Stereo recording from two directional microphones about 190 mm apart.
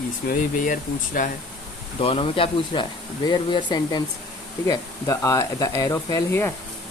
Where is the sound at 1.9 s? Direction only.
30° left (ahead or behind).